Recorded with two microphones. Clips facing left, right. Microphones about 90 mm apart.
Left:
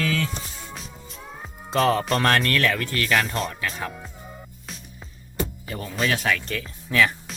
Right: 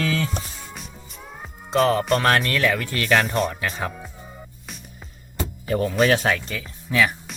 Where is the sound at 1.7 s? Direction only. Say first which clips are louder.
Right 2 dB; centre (ahead or behind); by 3.2 s 20° right (ahead or behind).